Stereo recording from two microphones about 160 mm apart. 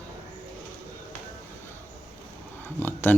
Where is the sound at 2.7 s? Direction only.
15° left (ahead or behind).